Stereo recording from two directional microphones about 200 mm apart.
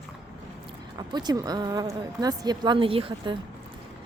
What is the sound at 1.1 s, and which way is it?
A woman's voice, 20° right (ahead or behind).